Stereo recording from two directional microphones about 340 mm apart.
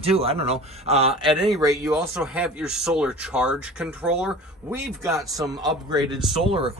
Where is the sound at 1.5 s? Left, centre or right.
Centre.